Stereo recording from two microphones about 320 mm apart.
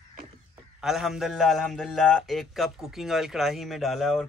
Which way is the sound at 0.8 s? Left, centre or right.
Centre.